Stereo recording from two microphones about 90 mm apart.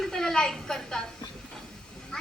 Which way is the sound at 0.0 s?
5° left (ahead or behind).